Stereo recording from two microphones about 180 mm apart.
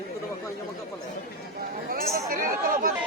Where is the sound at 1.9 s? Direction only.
55° right (ahead or behind).